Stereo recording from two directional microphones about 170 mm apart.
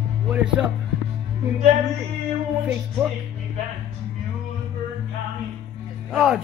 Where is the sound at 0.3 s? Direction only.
10° right (ahead or behind).